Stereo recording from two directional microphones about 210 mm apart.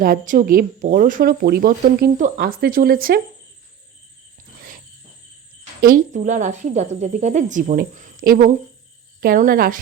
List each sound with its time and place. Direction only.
0.0 s speech: 45° right (ahead or behind)
5.8 s a woman's voice: 40° right (ahead or behind)